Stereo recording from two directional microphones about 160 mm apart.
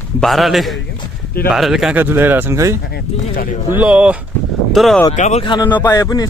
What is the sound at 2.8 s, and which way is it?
Speech, 70° left (ahead or behind).